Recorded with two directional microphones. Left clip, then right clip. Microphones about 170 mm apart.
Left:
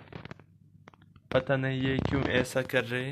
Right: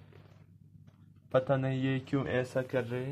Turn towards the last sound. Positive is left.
turn(degrees=5)  # may be behind; listen again after turning